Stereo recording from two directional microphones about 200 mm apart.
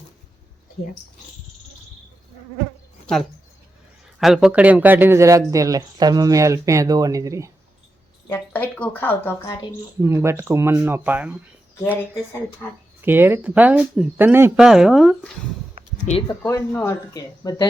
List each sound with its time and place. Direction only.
3.1 s a man's voice: 5° left (ahead or behind); by 7.5 s 15° right (ahead or behind)
8.3 s a woman's voice: 10° left (ahead or behind)
10.0 s a man's voice: 15° right (ahead or behind)
11.8 s a woman's voice: 10° left (ahead or behind)
13.0 s a man's voice: 10° right (ahead or behind)
16.1 s speech: 35° left (ahead or behind)
16.5 s a woman's voice: 10° left (ahead or behind)